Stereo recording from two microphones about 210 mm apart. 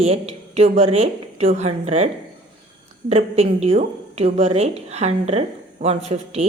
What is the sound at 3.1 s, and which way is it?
A woman's voice, 30° right (ahead or behind).